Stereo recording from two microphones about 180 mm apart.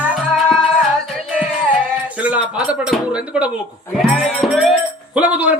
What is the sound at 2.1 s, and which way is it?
A man's voice, 5° right (ahead or behind).